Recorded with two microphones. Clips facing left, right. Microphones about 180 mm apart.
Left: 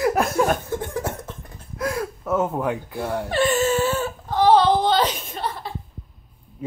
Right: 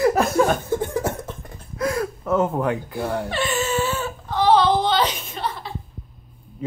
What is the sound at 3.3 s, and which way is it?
Whimper, 45° left (ahead or behind).